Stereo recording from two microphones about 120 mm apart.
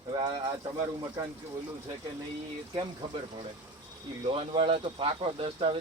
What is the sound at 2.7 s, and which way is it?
Speech, 40° right (ahead or behind).